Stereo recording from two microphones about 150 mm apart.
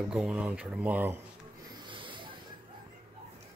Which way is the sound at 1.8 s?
35° right (ahead or behind).